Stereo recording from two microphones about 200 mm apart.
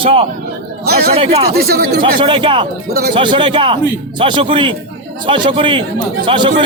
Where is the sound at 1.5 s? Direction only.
50° right (ahead or behind).